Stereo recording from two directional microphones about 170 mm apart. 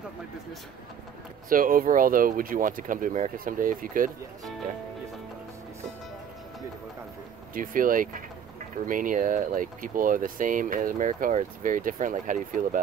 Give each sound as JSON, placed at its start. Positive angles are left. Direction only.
{"t": 1.5, "sound": "speech", "side_deg": -55}
{"t": 7.5, "sound": "speech", "side_deg": -55}